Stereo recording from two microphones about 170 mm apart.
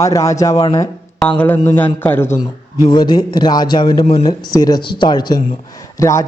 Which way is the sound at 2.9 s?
25° left (ahead or behind).